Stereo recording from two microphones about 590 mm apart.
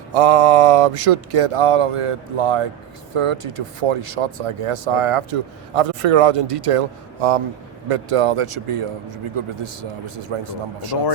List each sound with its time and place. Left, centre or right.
0.1 s speech: right
10.9 s speech: left